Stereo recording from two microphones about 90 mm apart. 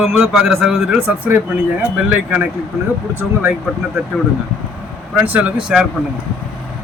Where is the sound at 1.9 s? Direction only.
15° right (ahead or behind).